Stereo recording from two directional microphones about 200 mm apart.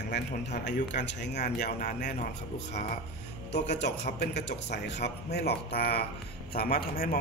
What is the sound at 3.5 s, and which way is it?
A man's voice, 60° left (ahead or behind).